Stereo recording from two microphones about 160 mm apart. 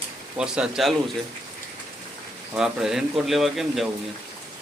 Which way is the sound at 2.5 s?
5° right (ahead or behind).